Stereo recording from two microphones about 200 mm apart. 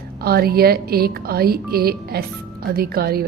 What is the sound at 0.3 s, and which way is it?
A woman's voice, 50° right (ahead or behind).